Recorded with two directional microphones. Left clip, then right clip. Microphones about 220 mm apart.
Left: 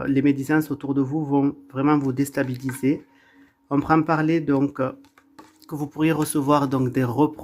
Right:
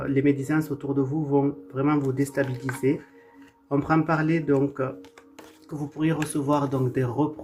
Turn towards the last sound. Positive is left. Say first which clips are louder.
# left 4 dB
turn(degrees=40)  # may be behind; listen again after turning